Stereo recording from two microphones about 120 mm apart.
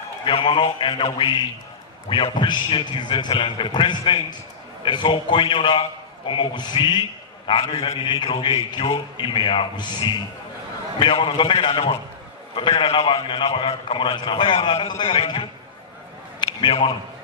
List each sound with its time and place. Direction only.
0.2 s a man's voice: 45° left (ahead or behind)
7.6 s a man's voice: 50° left (ahead or behind)
8.0 s a man's voice: 40° left (ahead or behind)
16.4 s a sound: 40° left (ahead or behind)